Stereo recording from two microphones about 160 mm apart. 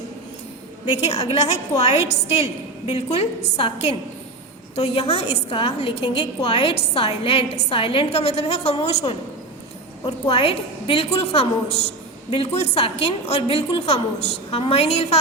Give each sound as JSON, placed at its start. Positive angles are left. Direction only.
{"t": 1.0, "sound": "a woman's voice", "side_deg": 40}